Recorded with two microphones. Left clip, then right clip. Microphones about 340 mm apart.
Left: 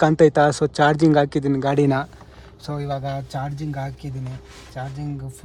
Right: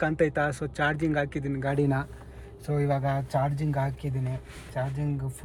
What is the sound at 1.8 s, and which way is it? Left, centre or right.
Speech, left.